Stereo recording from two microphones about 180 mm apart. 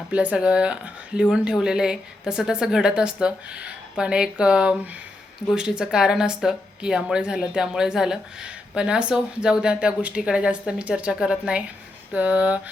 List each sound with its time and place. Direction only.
0.1 s speech: 10° right (ahead or behind)